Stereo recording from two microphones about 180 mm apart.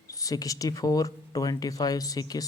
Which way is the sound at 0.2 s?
20° left (ahead or behind).